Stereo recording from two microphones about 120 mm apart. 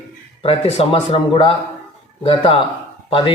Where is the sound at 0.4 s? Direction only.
55° left (ahead or behind).